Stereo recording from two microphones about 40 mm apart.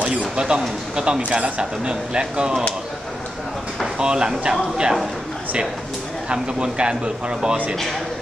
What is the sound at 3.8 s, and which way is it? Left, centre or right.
Speech, right.